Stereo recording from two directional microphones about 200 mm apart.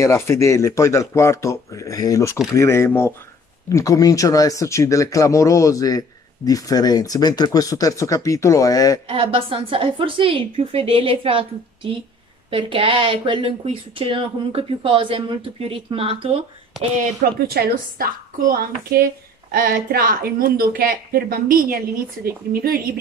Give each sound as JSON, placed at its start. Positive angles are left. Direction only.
{"t": 0.0, "sound": "speech", "side_deg": 15}
{"t": 9.0, "sound": "speech", "side_deg": -30}
{"t": 17.0, "sound": "a woman's voice", "side_deg": -50}